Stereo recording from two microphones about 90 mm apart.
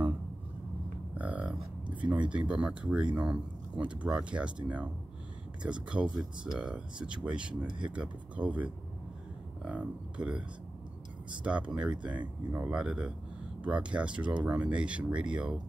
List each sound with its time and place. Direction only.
1.1 s a sound: 15° right (ahead or behind)
2.0 s speech: 15° right (ahead or behind)
11.4 s speech: 10° right (ahead or behind)